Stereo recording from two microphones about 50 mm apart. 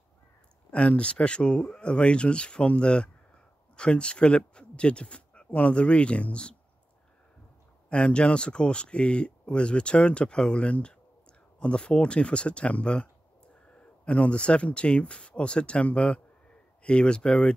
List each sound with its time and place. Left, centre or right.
0.7 s speech: left
7.9 s speech: centre